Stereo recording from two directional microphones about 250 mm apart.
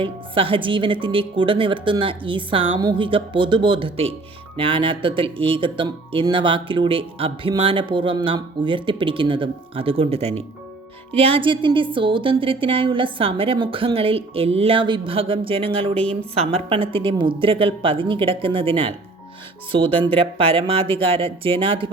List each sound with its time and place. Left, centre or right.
0.0 s speech: right